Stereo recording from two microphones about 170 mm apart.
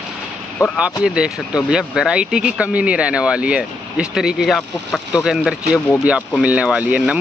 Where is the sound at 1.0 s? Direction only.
5° right (ahead or behind).